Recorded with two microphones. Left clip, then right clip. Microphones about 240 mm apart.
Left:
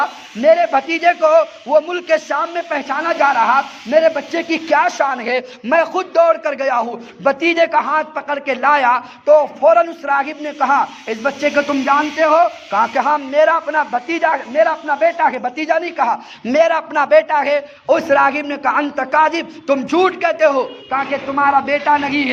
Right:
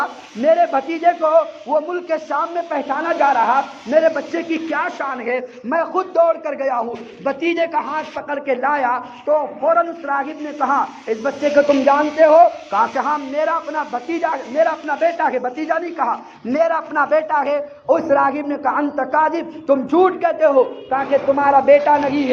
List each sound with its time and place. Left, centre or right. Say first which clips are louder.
0.0 s a man's voice: left 4 dB; left